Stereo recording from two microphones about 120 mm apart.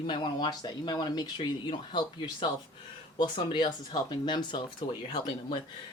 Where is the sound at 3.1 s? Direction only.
40° left (ahead or behind).